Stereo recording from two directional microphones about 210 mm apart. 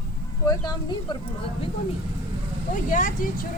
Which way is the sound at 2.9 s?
40° left (ahead or behind).